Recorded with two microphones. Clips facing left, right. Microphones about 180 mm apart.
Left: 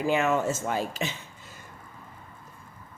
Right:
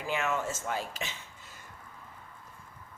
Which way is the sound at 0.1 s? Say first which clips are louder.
Left 6 dB; 30° left (ahead or behind).